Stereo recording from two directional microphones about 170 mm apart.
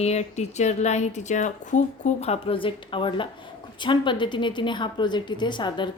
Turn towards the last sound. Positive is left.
turn(degrees=25)  # may be behind; listen again after turning